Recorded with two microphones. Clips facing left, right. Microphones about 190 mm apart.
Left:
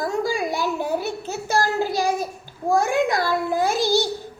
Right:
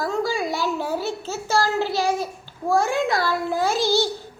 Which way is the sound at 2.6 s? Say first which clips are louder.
Left 1 dB; 15° left (ahead or behind).